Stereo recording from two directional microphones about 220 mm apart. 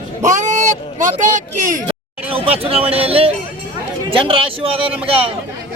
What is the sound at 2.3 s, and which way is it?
A man's voice, 25° right (ahead or behind).